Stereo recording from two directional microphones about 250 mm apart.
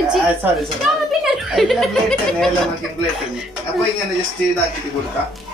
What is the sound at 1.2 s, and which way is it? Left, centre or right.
Speech, centre.